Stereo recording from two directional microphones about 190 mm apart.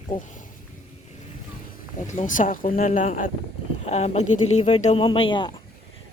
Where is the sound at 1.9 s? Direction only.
40° left (ahead or behind).